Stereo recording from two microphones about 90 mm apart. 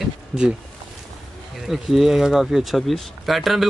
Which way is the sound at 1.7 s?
Centre (ahead or behind).